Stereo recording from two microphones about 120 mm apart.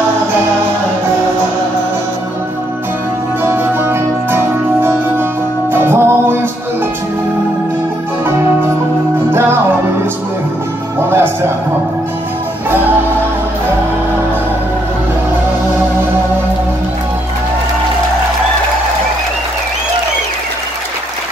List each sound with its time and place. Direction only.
3.4 s music: 20° right (ahead or behind)
11.1 s music: 20° right (ahead or behind)